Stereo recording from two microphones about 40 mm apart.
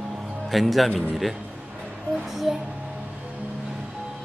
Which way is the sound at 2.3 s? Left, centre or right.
Centre.